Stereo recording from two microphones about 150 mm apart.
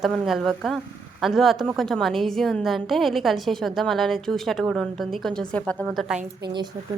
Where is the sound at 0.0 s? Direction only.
Centre (ahead or behind).